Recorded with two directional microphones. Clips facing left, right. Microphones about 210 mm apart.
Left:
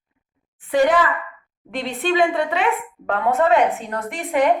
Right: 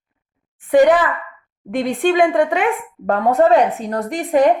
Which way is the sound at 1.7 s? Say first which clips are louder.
Right 5 dB; 50° right (ahead or behind).